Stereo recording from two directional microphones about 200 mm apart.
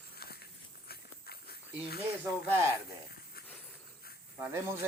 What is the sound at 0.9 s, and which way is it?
Walk, 50° left (ahead or behind).